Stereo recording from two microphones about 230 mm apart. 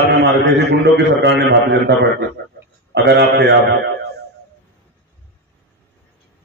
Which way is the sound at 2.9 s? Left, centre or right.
Right.